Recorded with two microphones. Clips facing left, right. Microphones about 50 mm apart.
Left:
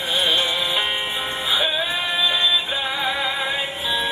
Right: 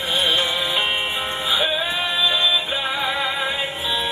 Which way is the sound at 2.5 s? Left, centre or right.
Right.